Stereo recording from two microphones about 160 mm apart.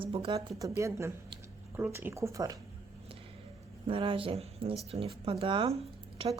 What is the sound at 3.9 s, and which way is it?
Speech, 35° right (ahead or behind).